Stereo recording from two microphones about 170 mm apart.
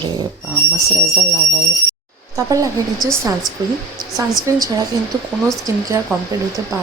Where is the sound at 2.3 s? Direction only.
20° right (ahead or behind).